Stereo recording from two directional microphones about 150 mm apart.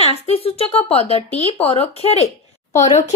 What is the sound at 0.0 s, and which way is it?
A child's voice, 40° left (ahead or behind).